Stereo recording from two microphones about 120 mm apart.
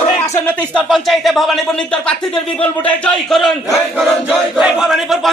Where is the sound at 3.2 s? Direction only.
Centre (ahead or behind).